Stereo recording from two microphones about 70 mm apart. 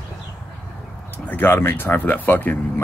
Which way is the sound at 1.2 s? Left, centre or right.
Left.